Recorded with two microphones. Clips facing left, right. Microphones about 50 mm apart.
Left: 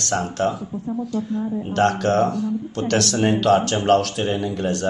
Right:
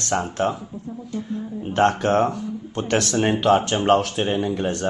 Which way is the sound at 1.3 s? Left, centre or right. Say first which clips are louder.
Left 5 dB; left.